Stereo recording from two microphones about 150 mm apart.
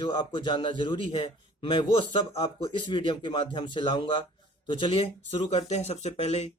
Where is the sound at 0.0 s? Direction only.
35° left (ahead or behind).